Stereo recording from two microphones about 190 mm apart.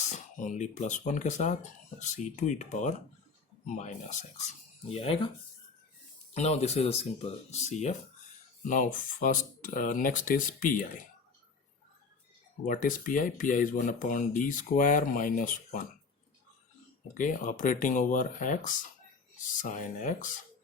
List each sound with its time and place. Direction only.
0.1 s speech: 40° left (ahead or behind)
6.3 s speech: 35° left (ahead or behind)
12.6 s speech: 45° left (ahead or behind)
17.2 s speech: 45° left (ahead or behind)